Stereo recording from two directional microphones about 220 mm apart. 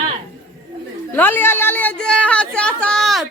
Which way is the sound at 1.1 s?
10° left (ahead or behind).